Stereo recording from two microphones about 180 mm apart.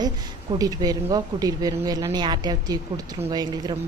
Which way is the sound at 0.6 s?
20° right (ahead or behind).